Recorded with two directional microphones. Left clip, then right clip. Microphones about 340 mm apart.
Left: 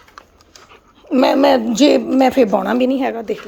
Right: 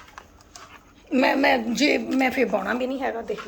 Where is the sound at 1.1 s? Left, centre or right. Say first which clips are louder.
Left 7 dB; centre.